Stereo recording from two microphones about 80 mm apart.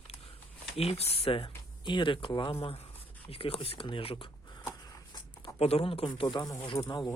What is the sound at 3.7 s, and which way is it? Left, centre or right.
Speech, left.